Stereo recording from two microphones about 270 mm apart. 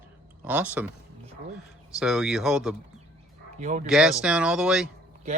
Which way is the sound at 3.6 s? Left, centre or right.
Right.